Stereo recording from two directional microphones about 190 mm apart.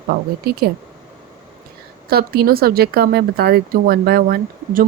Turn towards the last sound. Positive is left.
turn(degrees=-55)  # may be behind; listen again after turning